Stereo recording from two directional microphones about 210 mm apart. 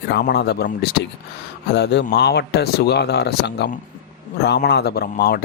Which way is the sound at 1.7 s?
55° left (ahead or behind).